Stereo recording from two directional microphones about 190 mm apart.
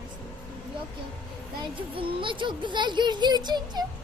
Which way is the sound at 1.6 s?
30° right (ahead or behind).